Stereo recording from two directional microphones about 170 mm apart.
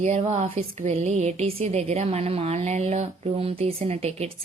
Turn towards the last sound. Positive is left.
turn(degrees=-40)  # may be behind; listen again after turning